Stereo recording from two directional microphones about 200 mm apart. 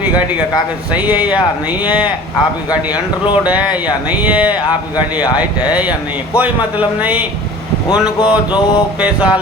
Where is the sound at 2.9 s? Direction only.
20° left (ahead or behind).